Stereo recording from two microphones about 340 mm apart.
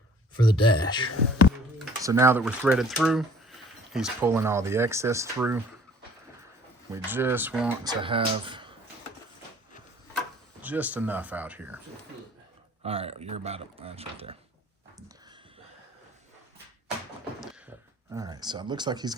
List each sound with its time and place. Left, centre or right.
0.3 s speech: centre
1.8 s speech: centre
6.9 s speech: centre
8.0 s speech: centre
10.6 s speech: centre
12.8 s speech: centre
18.1 s speech: centre